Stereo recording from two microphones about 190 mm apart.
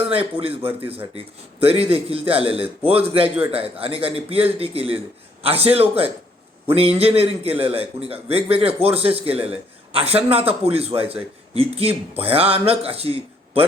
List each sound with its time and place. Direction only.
0.1 s a man's voice: 30° right (ahead or behind)